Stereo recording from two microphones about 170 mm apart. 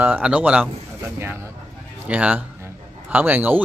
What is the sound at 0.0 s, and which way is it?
A man's voice, 10° right (ahead or behind).